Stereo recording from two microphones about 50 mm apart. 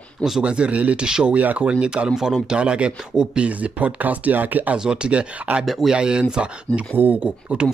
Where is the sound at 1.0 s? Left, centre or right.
Centre.